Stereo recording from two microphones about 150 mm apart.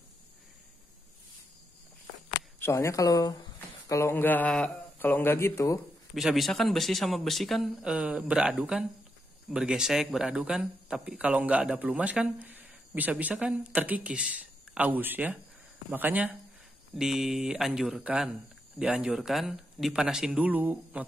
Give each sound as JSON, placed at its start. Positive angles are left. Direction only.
{"t": 2.6, "sound": "a man's voice", "side_deg": 20}
{"t": 6.1, "sound": "speech", "side_deg": 0}